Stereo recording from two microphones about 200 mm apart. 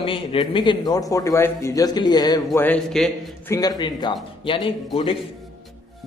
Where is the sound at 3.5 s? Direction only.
20° left (ahead or behind).